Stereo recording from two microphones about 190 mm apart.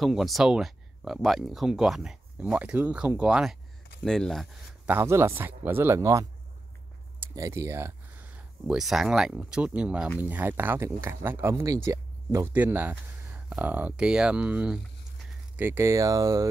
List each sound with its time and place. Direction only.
0.0 s speech: centre (ahead or behind)
4.9 s speech: 15° right (ahead or behind)